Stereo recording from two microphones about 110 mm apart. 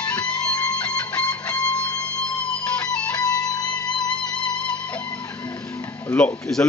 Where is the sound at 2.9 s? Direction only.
10° left (ahead or behind).